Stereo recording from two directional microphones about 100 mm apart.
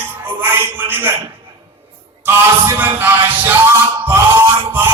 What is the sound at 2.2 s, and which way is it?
Speech, 20° right (ahead or behind).